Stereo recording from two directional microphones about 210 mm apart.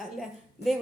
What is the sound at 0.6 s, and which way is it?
Speech, 55° left (ahead or behind).